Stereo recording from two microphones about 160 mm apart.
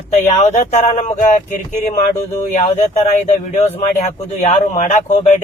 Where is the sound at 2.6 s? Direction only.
45° left (ahead or behind).